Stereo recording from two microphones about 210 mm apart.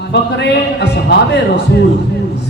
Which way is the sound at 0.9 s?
55° left (ahead or behind).